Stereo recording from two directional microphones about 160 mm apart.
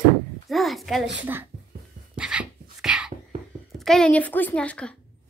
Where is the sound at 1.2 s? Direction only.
10° right (ahead or behind).